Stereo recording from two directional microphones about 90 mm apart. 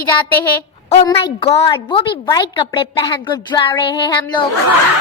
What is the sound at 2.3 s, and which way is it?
A woman's voice, 55° left (ahead or behind).